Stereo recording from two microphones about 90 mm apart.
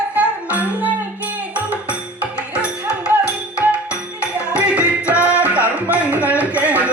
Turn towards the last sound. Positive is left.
turn(degrees=-15)  # may be behind; listen again after turning